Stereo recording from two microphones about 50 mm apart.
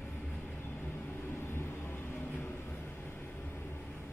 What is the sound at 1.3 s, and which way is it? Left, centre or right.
Vehicle, left.